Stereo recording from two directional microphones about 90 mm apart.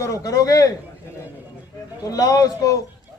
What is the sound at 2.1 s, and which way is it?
Speech, 40° left (ahead or behind).